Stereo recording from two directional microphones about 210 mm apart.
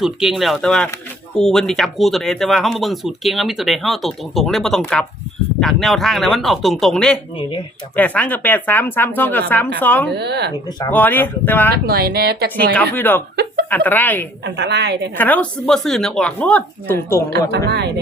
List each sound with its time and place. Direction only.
0.0 s a woman's voice: centre (ahead or behind)
10.1 s a woman's voice: 50° right (ahead or behind)
10.8 s a woman's voice: 10° left (ahead or behind)
11.9 s a woman's voice: 50° right (ahead or behind)
12.7 s a woman's voice: 5° left (ahead or behind)
13.3 s music: 50° right (ahead or behind)
13.7 s a woman's voice: 10° left (ahead or behind)
14.4 s a woman's voice: 55° right (ahead or behind)
15.2 s speech: 5° left (ahead or behind)
17.7 s a woman's voice: 55° right (ahead or behind)